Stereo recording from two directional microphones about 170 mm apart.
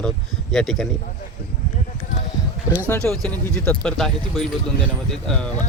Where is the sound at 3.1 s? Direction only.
5° left (ahead or behind).